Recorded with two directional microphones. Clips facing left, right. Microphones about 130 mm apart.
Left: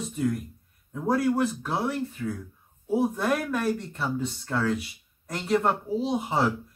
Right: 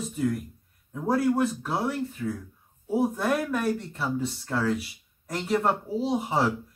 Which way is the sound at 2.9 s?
Centre (ahead or behind).